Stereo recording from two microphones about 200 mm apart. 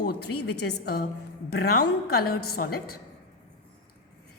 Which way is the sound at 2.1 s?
50° left (ahead or behind).